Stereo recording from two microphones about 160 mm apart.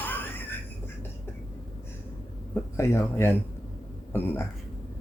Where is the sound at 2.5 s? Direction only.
15° left (ahead or behind).